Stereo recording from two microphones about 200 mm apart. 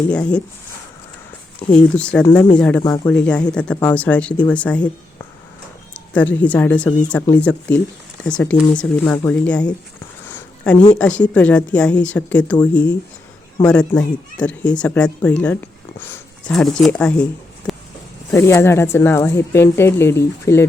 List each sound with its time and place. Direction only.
0.1 s speech: 5° left (ahead or behind)
1.7 s speech: 5° left (ahead or behind)
2.8 s speech: 15° left (ahead or behind)
3.2 s speech: 5° left (ahead or behind)
5.9 s speech: 5° left (ahead or behind)
10.2 s a sound: 10° left (ahead or behind)
10.9 s speech: 5° left (ahead or behind)
17.7 s a sound: centre (ahead or behind)
18.3 s speech: 15° left (ahead or behind)